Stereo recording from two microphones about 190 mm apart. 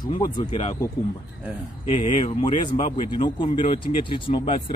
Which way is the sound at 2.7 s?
25° left (ahead or behind).